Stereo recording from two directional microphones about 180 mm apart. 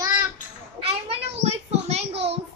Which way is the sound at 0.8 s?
35° right (ahead or behind).